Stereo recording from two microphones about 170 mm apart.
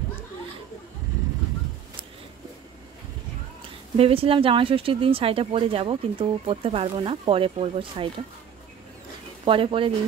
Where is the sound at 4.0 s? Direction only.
35° right (ahead or behind).